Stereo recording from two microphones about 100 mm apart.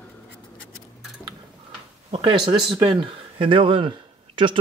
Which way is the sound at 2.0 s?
90° right.